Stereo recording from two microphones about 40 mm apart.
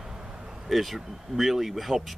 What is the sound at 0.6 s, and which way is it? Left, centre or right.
Speech, centre.